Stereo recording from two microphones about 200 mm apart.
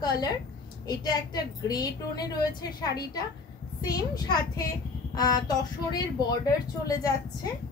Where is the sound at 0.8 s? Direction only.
20° left (ahead or behind).